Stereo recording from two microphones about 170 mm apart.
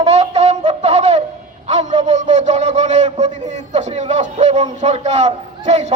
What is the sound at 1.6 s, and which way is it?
A man's voice, 40° right (ahead or behind).